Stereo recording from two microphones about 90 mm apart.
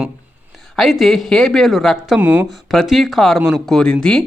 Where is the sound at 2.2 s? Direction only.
20° right (ahead or behind).